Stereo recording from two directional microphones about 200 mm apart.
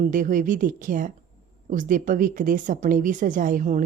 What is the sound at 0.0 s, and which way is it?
A woman's voice, 40° right (ahead or behind).